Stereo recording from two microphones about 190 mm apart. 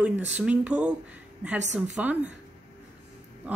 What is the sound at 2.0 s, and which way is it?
Speech, 5° right (ahead or behind).